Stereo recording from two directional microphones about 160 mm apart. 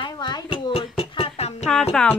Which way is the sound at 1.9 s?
5° left (ahead or behind).